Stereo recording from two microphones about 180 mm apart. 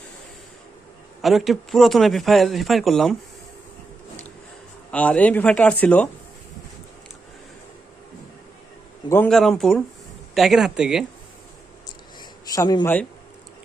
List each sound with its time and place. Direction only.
1.2 s a man's voice: centre (ahead or behind)
4.9 s speech: 10° left (ahead or behind)
9.0 s a man's voice: 10° left (ahead or behind)
12.5 s speech: 25° left (ahead or behind)
12.8 s speech: 10° left (ahead or behind)